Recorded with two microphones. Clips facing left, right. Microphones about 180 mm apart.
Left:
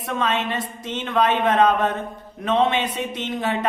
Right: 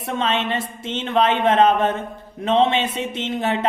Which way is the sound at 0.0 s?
25° right (ahead or behind).